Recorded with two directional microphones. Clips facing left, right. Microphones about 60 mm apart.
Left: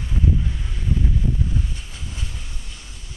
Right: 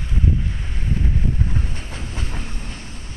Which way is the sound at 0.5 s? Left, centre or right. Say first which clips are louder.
Even; right.